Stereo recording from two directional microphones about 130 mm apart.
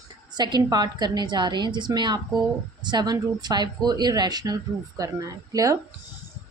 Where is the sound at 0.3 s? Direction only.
35° right (ahead or behind).